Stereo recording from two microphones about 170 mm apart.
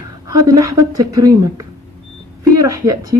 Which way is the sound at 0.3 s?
20° right (ahead or behind).